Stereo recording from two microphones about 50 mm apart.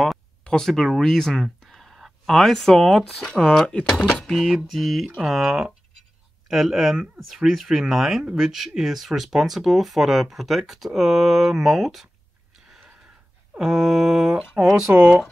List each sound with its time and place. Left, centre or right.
0.4 s a sound: centre
0.7 s speech: centre
1.0 s a sound: centre
2.2 s speech: centre
13.6 s mantra: centre
14.9 s speech: right